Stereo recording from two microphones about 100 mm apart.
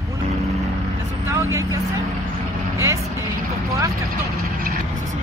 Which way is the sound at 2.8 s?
30° right (ahead or behind).